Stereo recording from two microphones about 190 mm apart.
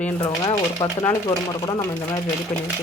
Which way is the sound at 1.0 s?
20° left (ahead or behind).